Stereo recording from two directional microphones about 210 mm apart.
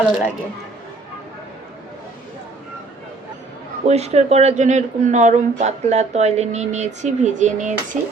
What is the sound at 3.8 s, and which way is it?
Speech, 30° right (ahead or behind).